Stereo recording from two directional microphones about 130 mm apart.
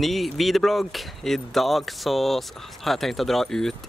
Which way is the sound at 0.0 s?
Centre (ahead or behind).